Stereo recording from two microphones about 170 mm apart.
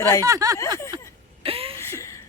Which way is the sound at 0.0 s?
15° left (ahead or behind).